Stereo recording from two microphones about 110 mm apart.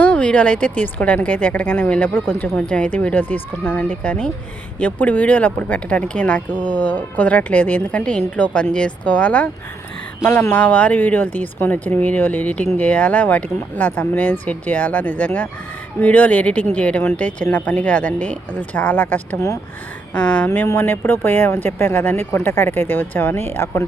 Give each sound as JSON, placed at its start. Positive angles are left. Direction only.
{"t": 0.0, "sound": "speech", "side_deg": 10}